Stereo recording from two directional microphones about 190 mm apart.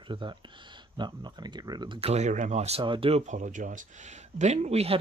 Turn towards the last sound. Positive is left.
turn(degrees=-30)  # may be behind; listen again after turning